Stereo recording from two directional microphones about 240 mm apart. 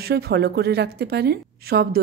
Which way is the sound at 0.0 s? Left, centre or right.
Right.